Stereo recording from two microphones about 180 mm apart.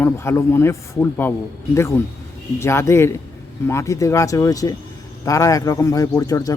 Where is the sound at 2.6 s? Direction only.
15° left (ahead or behind).